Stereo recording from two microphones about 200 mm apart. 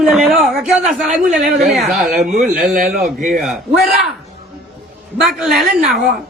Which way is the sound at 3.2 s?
40° right (ahead or behind).